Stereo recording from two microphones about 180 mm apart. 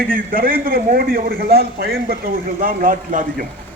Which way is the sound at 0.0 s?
50° right (ahead or behind).